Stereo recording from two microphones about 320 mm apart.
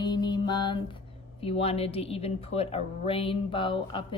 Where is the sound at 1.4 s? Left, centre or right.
Centre.